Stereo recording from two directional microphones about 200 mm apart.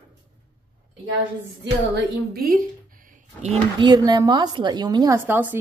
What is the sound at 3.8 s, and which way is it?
A woman's voice, 20° right (ahead or behind).